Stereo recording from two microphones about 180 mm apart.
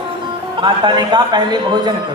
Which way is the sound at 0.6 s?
25° right (ahead or behind).